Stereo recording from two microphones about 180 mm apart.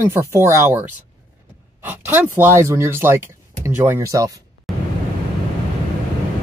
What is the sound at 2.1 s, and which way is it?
Speech, 10° right (ahead or behind).